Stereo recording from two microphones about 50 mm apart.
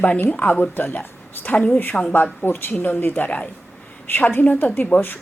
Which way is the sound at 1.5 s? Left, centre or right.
Left.